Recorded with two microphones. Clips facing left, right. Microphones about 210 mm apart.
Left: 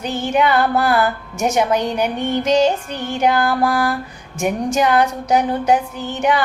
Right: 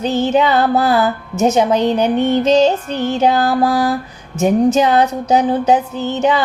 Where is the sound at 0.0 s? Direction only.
25° right (ahead or behind).